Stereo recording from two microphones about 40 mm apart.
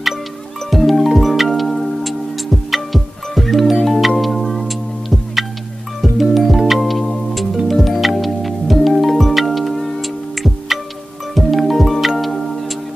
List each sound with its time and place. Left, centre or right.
0.7 s music: centre